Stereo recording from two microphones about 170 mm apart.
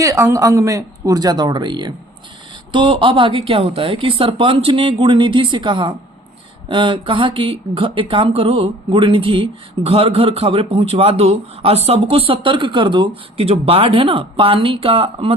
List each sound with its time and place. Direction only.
0.0 s speech: 15° right (ahead or behind); by 15.4 s 35° right (ahead or behind)